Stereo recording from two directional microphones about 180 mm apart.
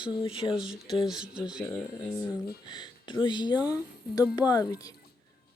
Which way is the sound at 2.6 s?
25° left (ahead or behind).